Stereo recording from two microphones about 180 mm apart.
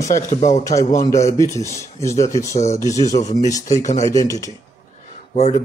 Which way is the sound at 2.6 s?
40° left (ahead or behind).